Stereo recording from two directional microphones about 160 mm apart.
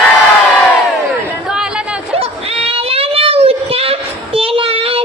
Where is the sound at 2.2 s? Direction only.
40° right (ahead or behind).